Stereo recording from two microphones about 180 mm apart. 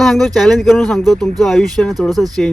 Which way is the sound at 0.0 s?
Centre (ahead or behind).